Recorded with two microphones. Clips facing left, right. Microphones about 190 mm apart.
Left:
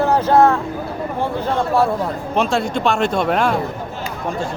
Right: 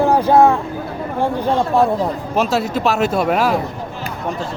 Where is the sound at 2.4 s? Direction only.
5° right (ahead or behind).